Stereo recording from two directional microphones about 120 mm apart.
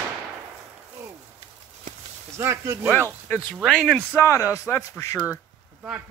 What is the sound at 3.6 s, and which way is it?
Speech, centre (ahead or behind).